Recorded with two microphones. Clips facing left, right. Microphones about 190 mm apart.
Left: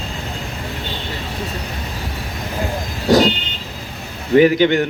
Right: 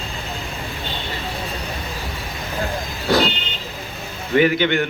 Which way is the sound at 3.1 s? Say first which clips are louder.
Left 5 dB; 40° left (ahead or behind).